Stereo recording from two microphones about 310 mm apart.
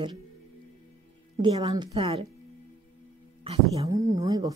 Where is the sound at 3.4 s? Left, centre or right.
Centre.